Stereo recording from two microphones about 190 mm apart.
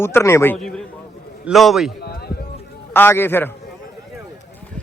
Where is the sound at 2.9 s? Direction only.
10° left (ahead or behind).